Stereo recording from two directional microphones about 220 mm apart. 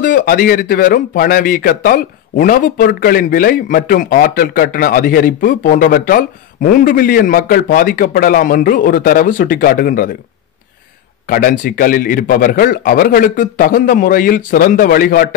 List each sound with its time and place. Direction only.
0.0 s a man's voice: 40° left (ahead or behind)
11.2 s a man's voice: 40° left (ahead or behind)